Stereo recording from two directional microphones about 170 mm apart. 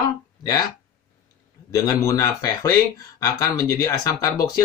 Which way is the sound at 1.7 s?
15° left (ahead or behind).